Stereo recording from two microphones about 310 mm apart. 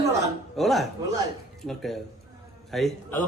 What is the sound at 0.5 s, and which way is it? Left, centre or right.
Speech, centre.